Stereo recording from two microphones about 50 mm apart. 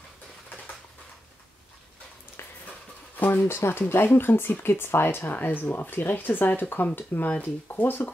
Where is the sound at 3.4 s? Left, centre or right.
Left.